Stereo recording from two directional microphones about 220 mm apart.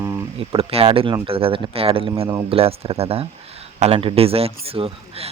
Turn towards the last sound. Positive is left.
turn(degrees=-25)  # may be behind; listen again after turning